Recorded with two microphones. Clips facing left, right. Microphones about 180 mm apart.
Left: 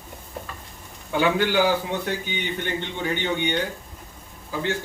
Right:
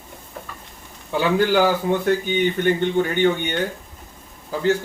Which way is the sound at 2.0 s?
50° right (ahead or behind).